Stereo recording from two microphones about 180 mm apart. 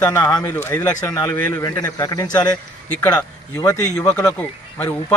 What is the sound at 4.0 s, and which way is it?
Speech, 5° left (ahead or behind).